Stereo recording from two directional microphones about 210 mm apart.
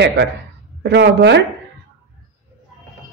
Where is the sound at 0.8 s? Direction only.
55° right (ahead or behind).